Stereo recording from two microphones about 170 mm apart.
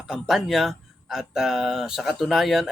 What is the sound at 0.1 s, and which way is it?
Speech, centre (ahead or behind).